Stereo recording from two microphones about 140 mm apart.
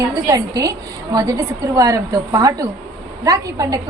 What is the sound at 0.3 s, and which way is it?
A woman's voice, 25° right (ahead or behind).